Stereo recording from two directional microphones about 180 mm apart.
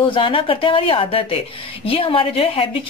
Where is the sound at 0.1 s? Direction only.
30° left (ahead or behind).